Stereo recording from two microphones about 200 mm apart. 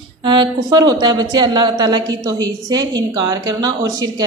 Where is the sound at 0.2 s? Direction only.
20° right (ahead or behind).